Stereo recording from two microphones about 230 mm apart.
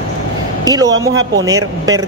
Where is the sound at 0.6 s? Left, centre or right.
Centre.